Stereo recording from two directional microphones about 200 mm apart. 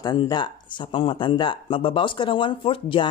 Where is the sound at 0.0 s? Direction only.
20° left (ahead or behind).